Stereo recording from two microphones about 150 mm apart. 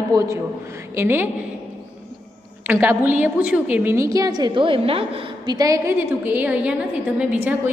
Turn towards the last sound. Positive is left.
turn(degrees=-10)  # may be behind; listen again after turning